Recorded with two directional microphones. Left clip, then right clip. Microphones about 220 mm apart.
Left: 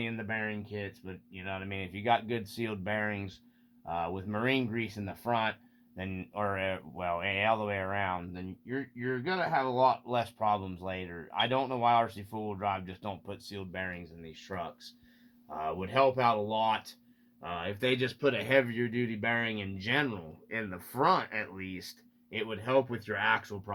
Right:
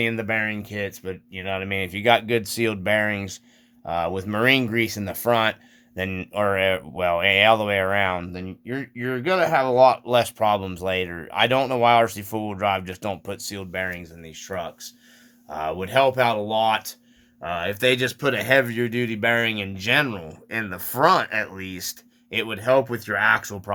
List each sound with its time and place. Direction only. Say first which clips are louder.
0.0 s speech: right 12 dB; 45° right (ahead or behind)